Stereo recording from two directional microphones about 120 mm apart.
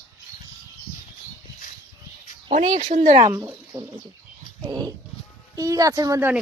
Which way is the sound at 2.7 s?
90° right.